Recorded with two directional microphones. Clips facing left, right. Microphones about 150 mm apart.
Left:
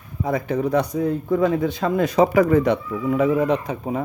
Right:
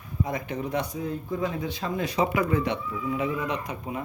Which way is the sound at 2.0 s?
45° left (ahead or behind).